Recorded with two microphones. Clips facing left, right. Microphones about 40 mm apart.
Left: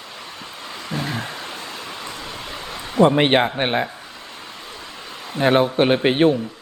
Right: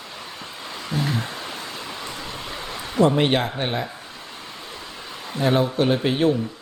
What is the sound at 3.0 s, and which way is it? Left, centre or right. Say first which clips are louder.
Speech: left 4 dB; left.